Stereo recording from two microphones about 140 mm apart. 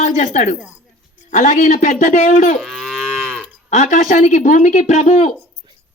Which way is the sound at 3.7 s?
60° left (ahead or behind).